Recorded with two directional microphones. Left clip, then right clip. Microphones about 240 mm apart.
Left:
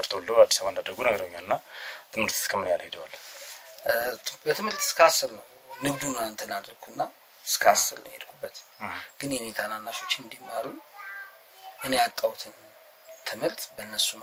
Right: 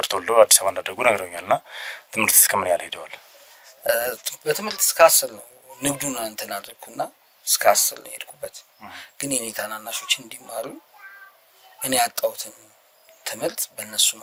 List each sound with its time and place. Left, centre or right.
0.0 s speech: right
11.8 s speech: right